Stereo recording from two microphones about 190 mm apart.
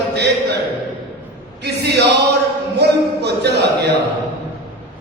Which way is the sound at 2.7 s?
60° right (ahead or behind).